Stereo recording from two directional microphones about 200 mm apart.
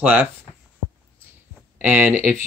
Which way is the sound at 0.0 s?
10° right (ahead or behind).